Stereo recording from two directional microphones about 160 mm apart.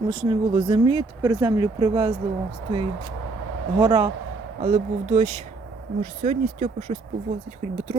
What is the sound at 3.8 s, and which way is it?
Speech, 25° right (ahead or behind).